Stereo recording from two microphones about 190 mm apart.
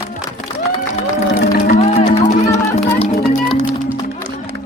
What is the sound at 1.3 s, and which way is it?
Music, 35° left (ahead or behind).